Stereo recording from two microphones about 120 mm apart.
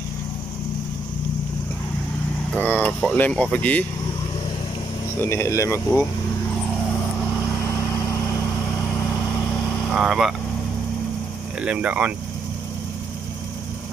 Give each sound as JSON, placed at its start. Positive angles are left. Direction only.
{"t": 2.5, "sound": "speech", "side_deg": 15}
{"t": 5.2, "sound": "speech", "side_deg": 20}
{"t": 9.9, "sound": "speech", "side_deg": -5}
{"t": 11.6, "sound": "speech", "side_deg": -10}